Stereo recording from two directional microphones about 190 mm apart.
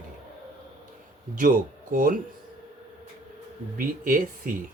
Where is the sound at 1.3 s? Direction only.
45° right (ahead or behind).